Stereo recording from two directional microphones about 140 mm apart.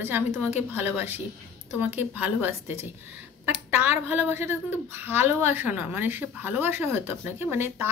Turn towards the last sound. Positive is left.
turn(degrees=-15)  # may be behind; listen again after turning